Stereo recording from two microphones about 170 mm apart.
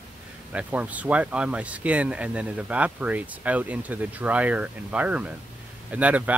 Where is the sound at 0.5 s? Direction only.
10° right (ahead or behind).